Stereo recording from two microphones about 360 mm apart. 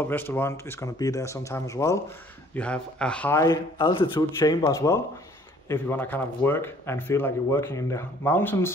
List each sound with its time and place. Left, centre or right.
0.0 s speech: centre